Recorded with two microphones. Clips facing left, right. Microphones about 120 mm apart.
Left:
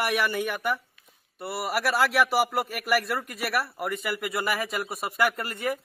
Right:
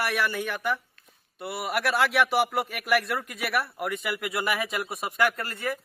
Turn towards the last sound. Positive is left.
turn(degrees=15)  # may be behind; listen again after turning